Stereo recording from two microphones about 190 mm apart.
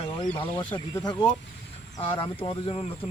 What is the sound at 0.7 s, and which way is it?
Speech, 20° left (ahead or behind).